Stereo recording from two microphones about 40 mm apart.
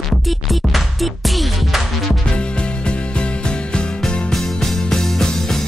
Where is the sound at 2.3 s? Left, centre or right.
Left.